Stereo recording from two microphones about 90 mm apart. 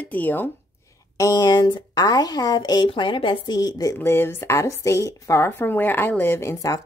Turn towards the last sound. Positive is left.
turn(degrees=25)  # may be behind; listen again after turning